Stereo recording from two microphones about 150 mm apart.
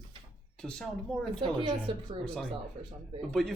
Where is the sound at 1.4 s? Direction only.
35° right (ahead or behind).